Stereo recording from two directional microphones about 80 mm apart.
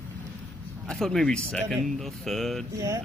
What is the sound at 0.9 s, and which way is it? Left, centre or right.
Speech, centre.